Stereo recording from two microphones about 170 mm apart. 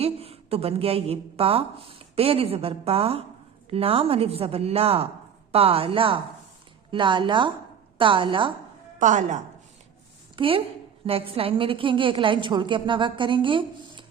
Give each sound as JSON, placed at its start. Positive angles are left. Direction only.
{"t": 0.0, "sound": "a woman's voice", "side_deg": -35}
{"t": 9.0, "sound": "a woman's voice", "side_deg": -45}
{"t": 10.3, "sound": "a woman's voice", "side_deg": -30}